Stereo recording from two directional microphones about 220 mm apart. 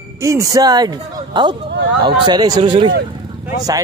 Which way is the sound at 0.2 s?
15° right (ahead or behind).